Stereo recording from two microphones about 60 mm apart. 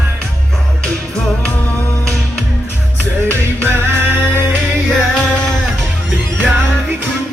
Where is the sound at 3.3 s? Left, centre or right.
Right.